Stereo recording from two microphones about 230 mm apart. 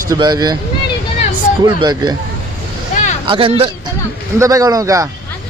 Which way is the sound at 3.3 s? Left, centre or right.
Right.